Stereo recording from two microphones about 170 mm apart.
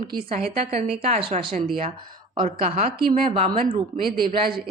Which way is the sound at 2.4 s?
50° right (ahead or behind).